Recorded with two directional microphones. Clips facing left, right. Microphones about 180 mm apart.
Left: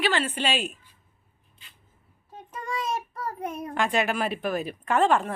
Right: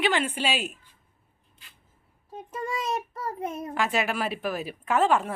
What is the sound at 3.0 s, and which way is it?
A child's voice, centre (ahead or behind).